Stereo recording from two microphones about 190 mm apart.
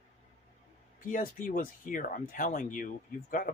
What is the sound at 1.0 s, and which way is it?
Speech, 45° left (ahead or behind).